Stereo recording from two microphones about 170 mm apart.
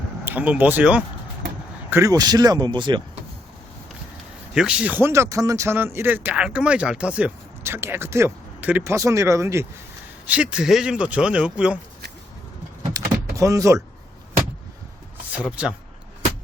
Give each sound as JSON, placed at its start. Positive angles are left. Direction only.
{"t": 0.3, "sound": "speech", "side_deg": -10}
{"t": 1.9, "sound": "speech", "side_deg": -20}
{"t": 4.5, "sound": "speech", "side_deg": -5}
{"t": 12.8, "sound": "power windows", "side_deg": -20}
{"t": 15.3, "sound": "speech", "side_deg": -5}